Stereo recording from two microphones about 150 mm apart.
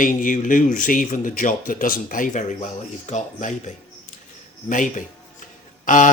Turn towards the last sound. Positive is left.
turn(degrees=60)  # may be behind; listen again after turning